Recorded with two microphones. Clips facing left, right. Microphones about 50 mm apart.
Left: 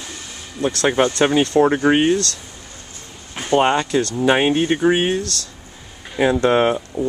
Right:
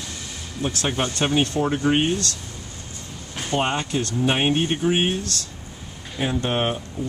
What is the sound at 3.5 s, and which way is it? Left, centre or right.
Speech, left.